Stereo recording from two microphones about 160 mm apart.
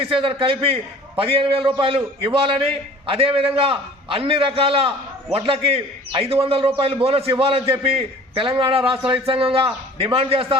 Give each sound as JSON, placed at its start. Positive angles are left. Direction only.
{"t": 0.0, "sound": "a man's voice", "side_deg": -35}